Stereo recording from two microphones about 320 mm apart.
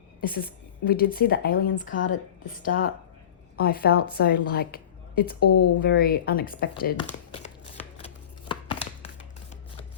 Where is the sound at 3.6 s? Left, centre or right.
Left.